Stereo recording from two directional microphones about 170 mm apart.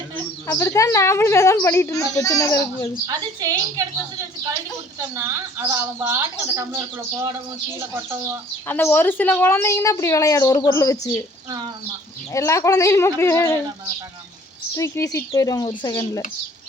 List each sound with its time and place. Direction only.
0.4 s a woman's voice: 15° left (ahead or behind)
3.1 s a woman's voice: 20° right (ahead or behind)
5.1 s speech: 15° right (ahead or behind)
8.6 s a woman's voice: 10° left (ahead or behind)
12.3 s a woman's voice: 20° left (ahead or behind)
14.8 s speech: 20° left (ahead or behind)